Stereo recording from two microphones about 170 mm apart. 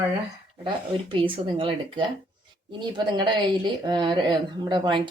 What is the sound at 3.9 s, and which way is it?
Speech, 25° right (ahead or behind).